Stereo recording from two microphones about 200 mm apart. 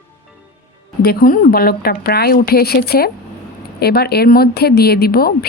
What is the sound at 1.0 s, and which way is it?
A woman's voice, 45° left (ahead or behind).